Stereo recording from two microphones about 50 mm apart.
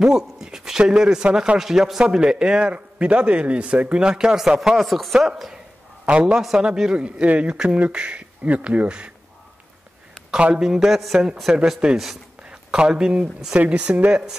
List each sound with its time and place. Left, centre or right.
0.0 s a man's voice: centre
4.6 s speech: centre
6.0 s a man's voice: right
7.5 s a man's voice: centre
10.3 s a man's voice: centre